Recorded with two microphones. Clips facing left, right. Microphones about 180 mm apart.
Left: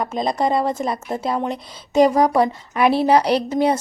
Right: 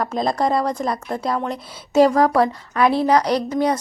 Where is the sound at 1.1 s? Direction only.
20° left (ahead or behind).